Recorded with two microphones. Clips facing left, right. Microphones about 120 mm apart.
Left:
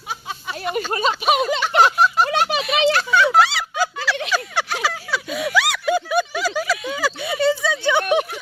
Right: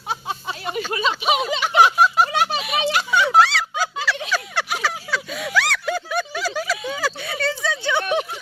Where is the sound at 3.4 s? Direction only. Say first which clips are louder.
Even; 10° left (ahead or behind).